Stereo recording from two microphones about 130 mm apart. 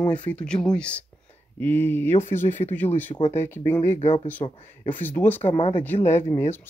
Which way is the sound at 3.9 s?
50° left (ahead or behind).